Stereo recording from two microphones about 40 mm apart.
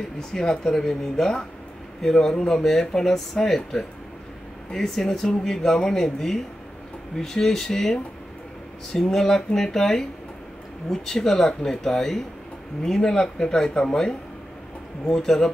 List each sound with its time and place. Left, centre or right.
0.3 s speech: centre